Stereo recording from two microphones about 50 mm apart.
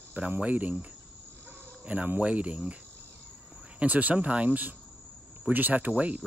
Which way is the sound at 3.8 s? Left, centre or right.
Right.